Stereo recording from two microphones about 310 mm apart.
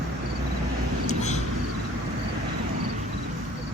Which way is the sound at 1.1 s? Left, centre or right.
Left.